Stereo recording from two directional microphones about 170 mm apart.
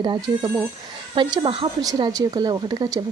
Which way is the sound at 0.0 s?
25° right (ahead or behind).